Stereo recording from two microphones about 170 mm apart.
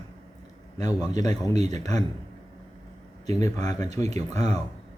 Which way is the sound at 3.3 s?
20° left (ahead or behind).